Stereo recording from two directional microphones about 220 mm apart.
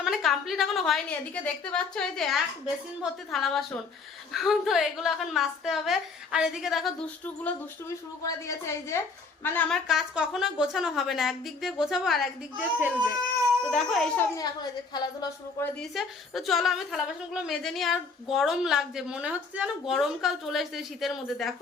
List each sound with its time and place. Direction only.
0.0 s a woman's voice: centre (ahead or behind)
7.4 s a woman's voice: 15° left (ahead or behind)
14.3 s a woman's voice: 20° left (ahead or behind)
15.8 s a woman's voice: centre (ahead or behind)